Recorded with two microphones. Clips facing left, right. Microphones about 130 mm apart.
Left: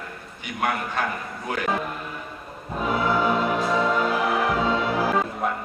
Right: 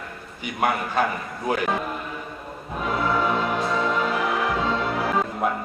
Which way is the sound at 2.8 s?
Centre (ahead or behind).